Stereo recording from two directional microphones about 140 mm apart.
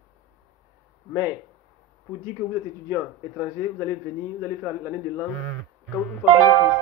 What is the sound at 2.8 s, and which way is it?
A man's voice, 15° right (ahead or behind).